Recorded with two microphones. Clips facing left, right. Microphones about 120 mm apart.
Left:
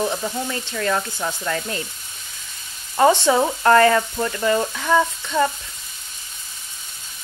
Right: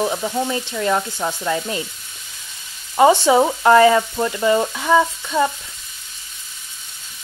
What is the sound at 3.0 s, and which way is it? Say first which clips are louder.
Frying: right 3 dB; 15° right (ahead or behind).